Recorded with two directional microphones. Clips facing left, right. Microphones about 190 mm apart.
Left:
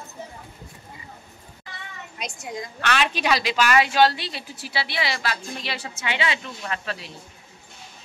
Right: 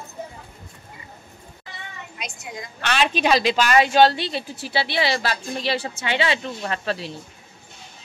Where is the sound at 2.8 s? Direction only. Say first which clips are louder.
Right 3 dB; 20° right (ahead or behind).